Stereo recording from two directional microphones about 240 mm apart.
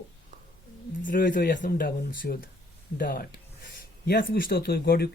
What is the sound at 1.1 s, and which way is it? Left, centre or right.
Speech, left.